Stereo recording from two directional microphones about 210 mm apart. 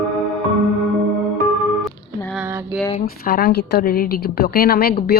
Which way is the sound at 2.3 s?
10° right (ahead or behind).